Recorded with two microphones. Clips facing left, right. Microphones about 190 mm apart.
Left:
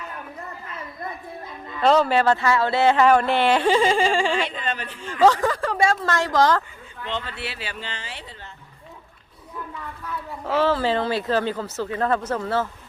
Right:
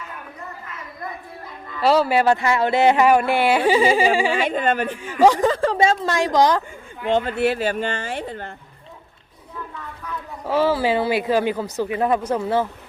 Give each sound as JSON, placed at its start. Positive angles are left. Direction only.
{"t": 1.8, "sound": "speech", "side_deg": -5}
{"t": 4.4, "sound": "speech", "side_deg": -50}
{"t": 5.0, "sound": "speech", "side_deg": -10}
{"t": 7.1, "sound": "speech", "side_deg": -50}
{"t": 10.4, "sound": "speech", "side_deg": -10}